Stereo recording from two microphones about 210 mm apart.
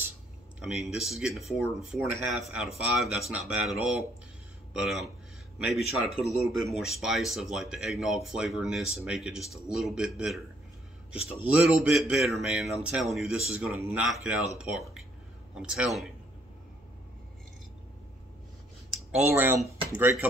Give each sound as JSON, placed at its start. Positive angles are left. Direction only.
{"t": 0.6, "sound": "speech", "side_deg": 0}
{"t": 18.9, "sound": "speech", "side_deg": -5}